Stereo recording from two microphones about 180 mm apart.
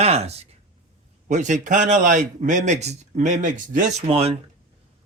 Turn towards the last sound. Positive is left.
turn(degrees=-35)  # may be behind; listen again after turning